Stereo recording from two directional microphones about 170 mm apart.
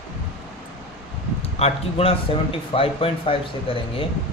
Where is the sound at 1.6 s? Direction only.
35° left (ahead or behind).